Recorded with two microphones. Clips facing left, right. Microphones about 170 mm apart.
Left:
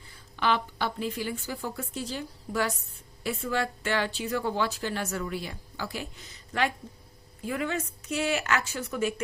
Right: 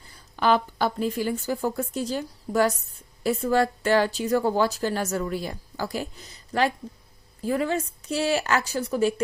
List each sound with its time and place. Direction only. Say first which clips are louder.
0.3 s a woman's voice: right 6 dB; 40° right (ahead or behind)